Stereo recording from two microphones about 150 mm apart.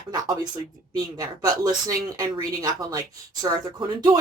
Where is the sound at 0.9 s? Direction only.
25° right (ahead or behind).